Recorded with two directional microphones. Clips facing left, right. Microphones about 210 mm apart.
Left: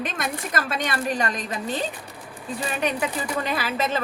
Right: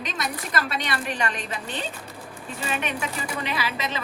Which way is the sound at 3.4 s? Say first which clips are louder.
Left 4 dB; 45° left (ahead or behind).